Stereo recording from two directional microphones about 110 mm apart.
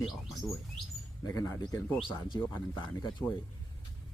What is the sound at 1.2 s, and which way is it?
Speech, 30° left (ahead or behind).